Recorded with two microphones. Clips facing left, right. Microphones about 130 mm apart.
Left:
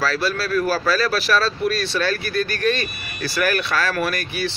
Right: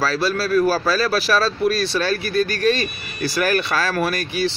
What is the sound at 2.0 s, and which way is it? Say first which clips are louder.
Speech: right 2 dB; 30° right (ahead or behind).